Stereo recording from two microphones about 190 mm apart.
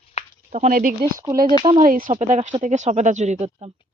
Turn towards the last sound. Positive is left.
turn(degrees=-35)  # may be behind; listen again after turning